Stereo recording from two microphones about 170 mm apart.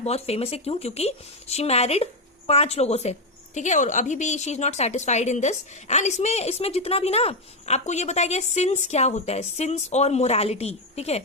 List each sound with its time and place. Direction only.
0.0 s a woman's voice: 35° left (ahead or behind)